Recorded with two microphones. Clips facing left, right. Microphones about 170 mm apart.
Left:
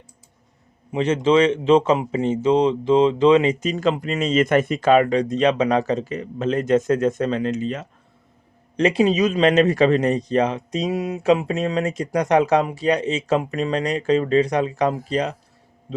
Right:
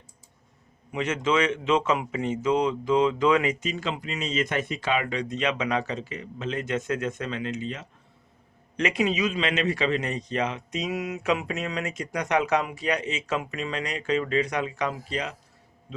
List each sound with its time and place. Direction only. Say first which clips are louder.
0.9 s a man's voice: left 8 dB; 30° left (ahead or behind)
3.6 s a man's voice: left 9 dB; 45° left (ahead or behind)
8.7 s a man's voice: left 8 dB; 30° left (ahead or behind)